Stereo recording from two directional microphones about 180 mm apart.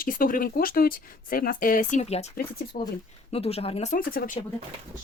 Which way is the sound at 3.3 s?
35° left (ahead or behind).